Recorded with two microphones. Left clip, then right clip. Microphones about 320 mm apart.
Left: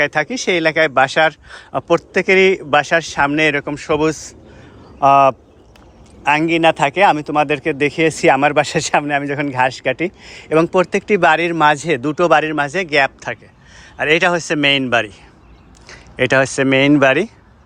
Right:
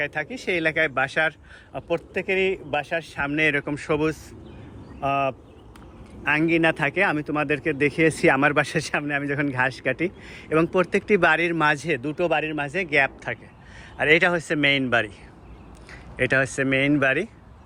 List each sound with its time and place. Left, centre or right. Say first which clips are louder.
0.0 s a man's voice: left 11 dB; centre